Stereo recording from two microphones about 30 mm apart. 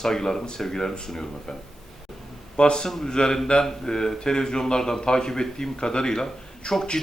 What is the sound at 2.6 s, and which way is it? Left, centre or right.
Speech, left.